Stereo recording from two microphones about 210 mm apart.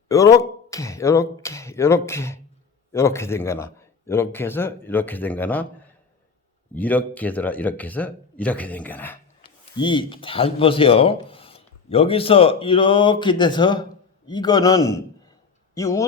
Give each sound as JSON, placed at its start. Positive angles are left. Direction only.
{"t": 0.1, "sound": "a sound", "side_deg": 15}
{"t": 2.9, "sound": "speech", "side_deg": 15}
{"t": 6.7, "sound": "speech", "side_deg": 5}
{"t": 9.7, "sound": "a man's voice", "side_deg": 20}